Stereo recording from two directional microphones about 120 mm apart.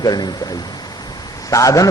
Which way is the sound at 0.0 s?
35° left (ahead or behind).